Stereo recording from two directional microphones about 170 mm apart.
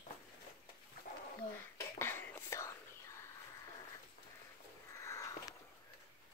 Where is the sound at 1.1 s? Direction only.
45° left (ahead or behind).